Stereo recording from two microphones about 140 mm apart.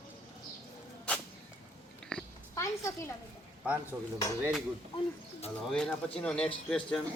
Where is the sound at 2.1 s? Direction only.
5° left (ahead or behind).